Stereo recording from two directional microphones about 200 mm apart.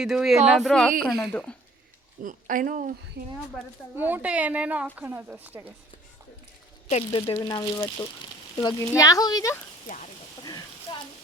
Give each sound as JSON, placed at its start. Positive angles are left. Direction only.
{"t": 0.0, "sound": "speech", "side_deg": 0}
{"t": 2.2, "sound": "speech", "side_deg": -40}
{"t": 3.9, "sound": "a woman's voice", "side_deg": -10}
{"t": 6.9, "sound": "speech", "side_deg": 25}
{"t": 10.9, "sound": "a sound", "side_deg": 25}